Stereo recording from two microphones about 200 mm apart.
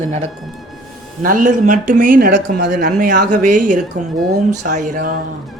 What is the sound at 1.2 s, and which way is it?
A man's voice, 40° right (ahead or behind).